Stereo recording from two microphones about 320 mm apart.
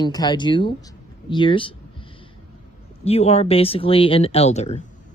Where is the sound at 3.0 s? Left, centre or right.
Centre.